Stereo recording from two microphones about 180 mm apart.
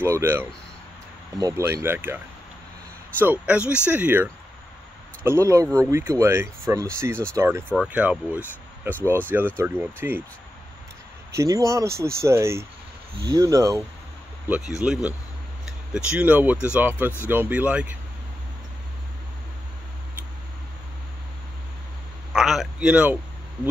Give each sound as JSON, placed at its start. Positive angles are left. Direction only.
{"t": 0.0, "sound": "speech", "side_deg": -15}
{"t": 7.7, "sound": "speech", "side_deg": -5}
{"t": 11.3, "sound": "speech", "side_deg": -15}
{"t": 14.5, "sound": "speech", "side_deg": -5}
{"t": 22.3, "sound": "a sound", "side_deg": 0}